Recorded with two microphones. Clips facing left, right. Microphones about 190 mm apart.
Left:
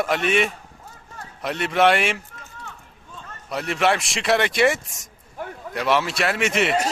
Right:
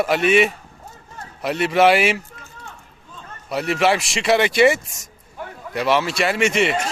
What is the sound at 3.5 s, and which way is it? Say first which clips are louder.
Speech: right 3 dB; 5° right (ahead or behind).